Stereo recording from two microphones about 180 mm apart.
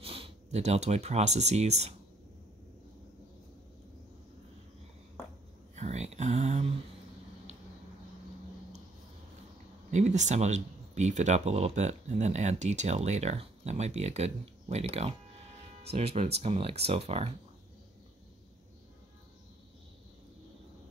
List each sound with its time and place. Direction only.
0.0 s speech: 30° right (ahead or behind)
5.8 s a sound: 40° right (ahead or behind)
9.8 s speech: 40° right (ahead or behind)